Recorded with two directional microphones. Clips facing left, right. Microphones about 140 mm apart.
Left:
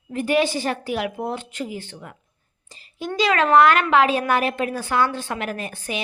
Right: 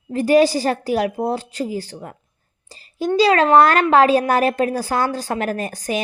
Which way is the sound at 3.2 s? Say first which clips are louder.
Right 3 dB; 35° right (ahead or behind).